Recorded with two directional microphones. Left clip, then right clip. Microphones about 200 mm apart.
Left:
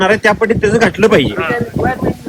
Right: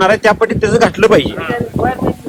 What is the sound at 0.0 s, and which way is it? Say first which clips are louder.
Speech: right 1 dB; 25° right (ahead or behind).